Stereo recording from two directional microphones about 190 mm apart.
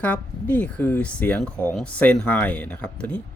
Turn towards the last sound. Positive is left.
turn(degrees=5)  # may be behind; listen again after turning